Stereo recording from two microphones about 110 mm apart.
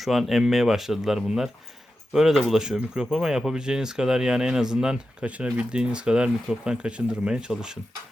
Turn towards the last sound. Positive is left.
turn(degrees=-5)  # may be behind; listen again after turning